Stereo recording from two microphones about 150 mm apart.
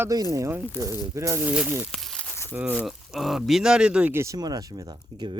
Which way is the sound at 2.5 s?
10° right (ahead or behind).